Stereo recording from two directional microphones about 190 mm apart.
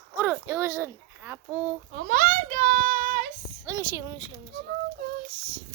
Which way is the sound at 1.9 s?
45° right (ahead or behind).